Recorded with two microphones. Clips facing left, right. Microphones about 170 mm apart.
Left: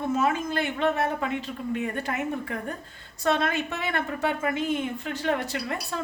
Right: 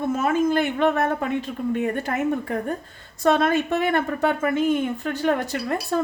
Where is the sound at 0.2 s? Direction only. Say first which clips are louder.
Right 5 dB; 50° right (ahead or behind).